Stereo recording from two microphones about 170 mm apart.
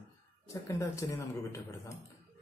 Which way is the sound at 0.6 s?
20° left (ahead or behind).